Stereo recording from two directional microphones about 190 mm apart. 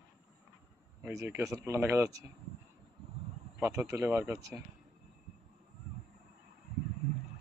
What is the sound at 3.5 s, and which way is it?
Speech, 15° right (ahead or behind).